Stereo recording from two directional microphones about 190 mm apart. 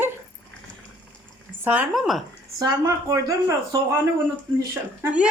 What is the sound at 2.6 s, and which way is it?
A woman's voice, 20° right (ahead or behind).